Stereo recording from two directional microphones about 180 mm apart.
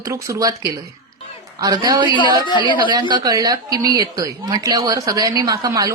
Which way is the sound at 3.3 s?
20° right (ahead or behind).